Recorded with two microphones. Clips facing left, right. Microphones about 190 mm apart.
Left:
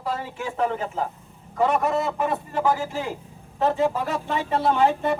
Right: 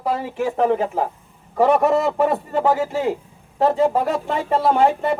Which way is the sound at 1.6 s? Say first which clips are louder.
Right 6 dB; 60° right (ahead or behind).